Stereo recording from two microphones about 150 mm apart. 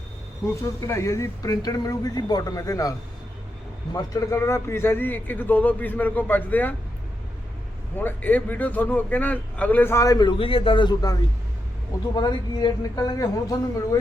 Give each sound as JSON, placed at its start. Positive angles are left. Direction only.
{"t": 0.8, "sound": "speech", "side_deg": 20}
{"t": 3.9, "sound": "a man's voice", "side_deg": 20}
{"t": 7.9, "sound": "a man's voice", "side_deg": 10}